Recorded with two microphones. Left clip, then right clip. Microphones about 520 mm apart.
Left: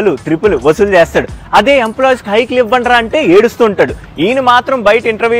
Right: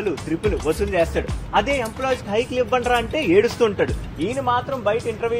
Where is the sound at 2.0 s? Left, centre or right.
Left.